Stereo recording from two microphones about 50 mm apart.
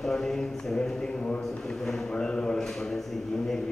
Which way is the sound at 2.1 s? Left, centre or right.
Centre.